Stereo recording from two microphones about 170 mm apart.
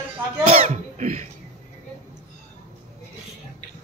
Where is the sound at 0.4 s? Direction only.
40° right (ahead or behind).